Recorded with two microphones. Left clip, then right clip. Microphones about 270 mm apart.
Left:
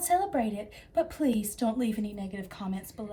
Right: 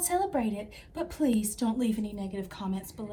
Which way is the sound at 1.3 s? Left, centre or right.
Left.